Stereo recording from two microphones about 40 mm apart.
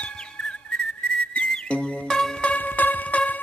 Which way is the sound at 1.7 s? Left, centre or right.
Left.